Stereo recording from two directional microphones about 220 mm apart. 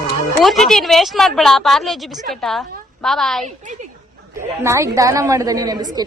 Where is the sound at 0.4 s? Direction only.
Centre (ahead or behind).